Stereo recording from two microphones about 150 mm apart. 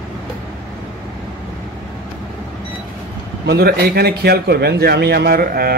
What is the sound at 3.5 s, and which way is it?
A man's voice, 90° right.